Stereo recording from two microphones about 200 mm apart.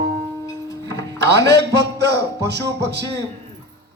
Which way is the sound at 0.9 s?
60° right (ahead or behind).